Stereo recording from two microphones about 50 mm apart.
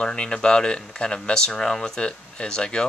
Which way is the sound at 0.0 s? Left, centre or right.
Centre.